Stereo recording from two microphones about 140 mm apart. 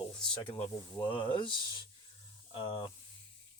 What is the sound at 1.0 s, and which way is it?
Speech, 35° left (ahead or behind).